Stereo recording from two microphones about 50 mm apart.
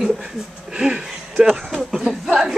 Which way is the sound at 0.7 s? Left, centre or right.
Centre.